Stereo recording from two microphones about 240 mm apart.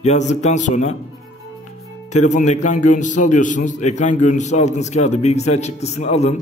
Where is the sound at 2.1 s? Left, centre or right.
Left.